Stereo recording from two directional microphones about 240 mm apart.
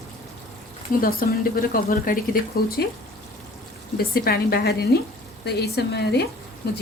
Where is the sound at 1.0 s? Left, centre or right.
Left.